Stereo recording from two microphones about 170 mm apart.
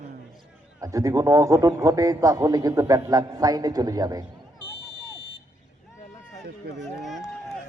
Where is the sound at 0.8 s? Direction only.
20° right (ahead or behind).